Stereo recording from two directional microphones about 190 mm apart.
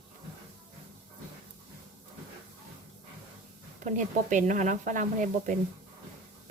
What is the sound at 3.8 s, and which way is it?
Speech, 40° right (ahead or behind).